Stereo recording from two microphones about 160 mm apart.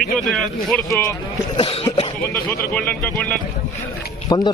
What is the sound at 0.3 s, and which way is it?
Speech, centre (ahead or behind).